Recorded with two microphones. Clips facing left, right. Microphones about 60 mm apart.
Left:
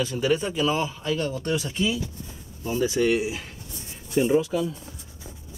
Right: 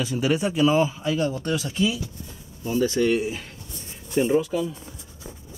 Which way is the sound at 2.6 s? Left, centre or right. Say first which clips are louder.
Right 1 dB; centre.